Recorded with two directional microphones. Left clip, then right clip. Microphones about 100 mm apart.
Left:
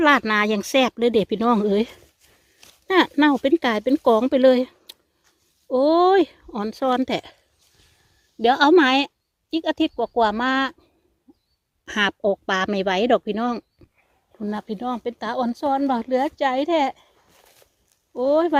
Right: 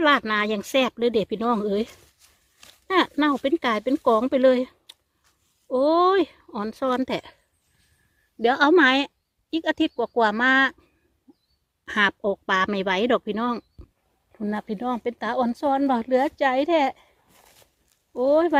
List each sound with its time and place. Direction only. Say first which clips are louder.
0.0 s speech: left 3 dB; 65° left (ahead or behind); by 2.0 s 90° left
2.8 s speech: left 4 dB; 65° left (ahead or behind)
3.4 s speech: left 3 dB; 50° left (ahead or behind)
8.4 s speech: left 2 dB; 40° left (ahead or behind); by 10.8 s 20° left (ahead or behind)
11.9 s speech: left 1 dB; 35° left (ahead or behind)
14.3 s speech: even; centre (ahead or behind)
18.1 s speech: even; 15° left (ahead or behind)